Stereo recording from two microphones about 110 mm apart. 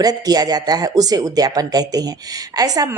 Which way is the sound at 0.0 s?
35° right (ahead or behind).